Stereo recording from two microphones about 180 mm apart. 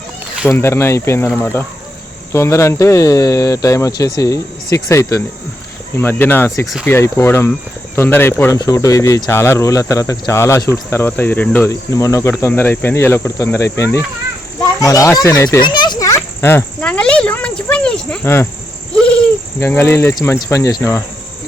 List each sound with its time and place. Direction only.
0.5 s cricket: 15° left (ahead or behind)
2.3 s speech: 15° left (ahead or behind)
6.0 s cricket: 10° left (ahead or behind)
14.6 s a child's voice: 20° left (ahead or behind)
18.9 s bird: 5° left (ahead or behind)
19.5 s cricket: 15° left (ahead or behind)